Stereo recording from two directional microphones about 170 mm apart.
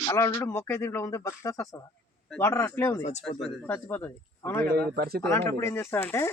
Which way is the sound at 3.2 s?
Centre (ahead or behind).